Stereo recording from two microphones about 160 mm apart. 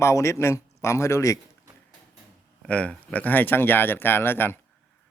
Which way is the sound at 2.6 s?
5° left (ahead or behind).